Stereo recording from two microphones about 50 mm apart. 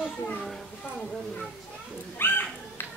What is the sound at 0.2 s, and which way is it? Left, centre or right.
Speech, left.